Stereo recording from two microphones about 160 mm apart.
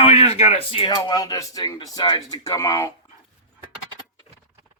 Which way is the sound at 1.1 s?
20° left (ahead or behind).